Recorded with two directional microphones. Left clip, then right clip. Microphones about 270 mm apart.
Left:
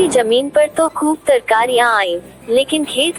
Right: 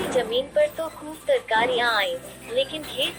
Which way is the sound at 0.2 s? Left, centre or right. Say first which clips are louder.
Left 5 dB; left.